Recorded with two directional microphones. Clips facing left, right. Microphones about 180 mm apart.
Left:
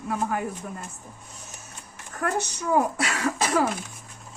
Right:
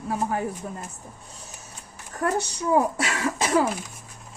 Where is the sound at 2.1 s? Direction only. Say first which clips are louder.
Right 2 dB; 30° right (ahead or behind).